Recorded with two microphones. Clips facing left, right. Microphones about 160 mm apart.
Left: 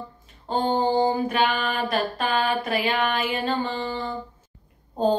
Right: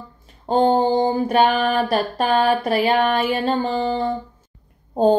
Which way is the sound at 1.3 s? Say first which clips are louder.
Right 7 dB; 40° right (ahead or behind).